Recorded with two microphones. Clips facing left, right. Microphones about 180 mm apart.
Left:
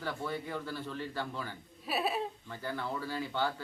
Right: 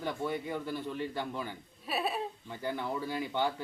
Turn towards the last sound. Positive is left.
turn(degrees=-15)  # may be behind; listen again after turning